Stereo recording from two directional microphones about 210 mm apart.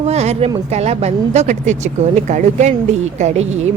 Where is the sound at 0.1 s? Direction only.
30° right (ahead or behind).